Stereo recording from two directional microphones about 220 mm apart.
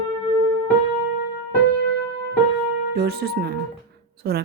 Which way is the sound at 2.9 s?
50° right (ahead or behind).